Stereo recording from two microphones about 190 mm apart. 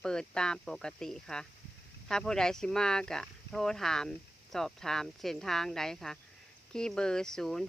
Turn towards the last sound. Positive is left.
turn(degrees=0)  # may be behind; listen again after turning